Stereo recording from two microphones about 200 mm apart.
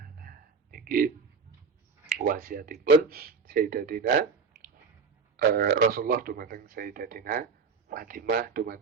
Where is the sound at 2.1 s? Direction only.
45° right (ahead or behind).